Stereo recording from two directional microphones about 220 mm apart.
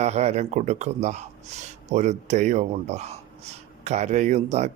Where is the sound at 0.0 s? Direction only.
30° right (ahead or behind).